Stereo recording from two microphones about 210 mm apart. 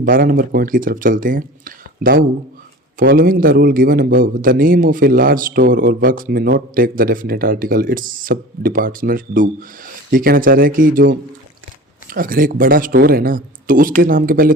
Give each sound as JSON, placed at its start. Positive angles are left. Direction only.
{"t": 0.0, "sound": "a man's voice", "side_deg": -40}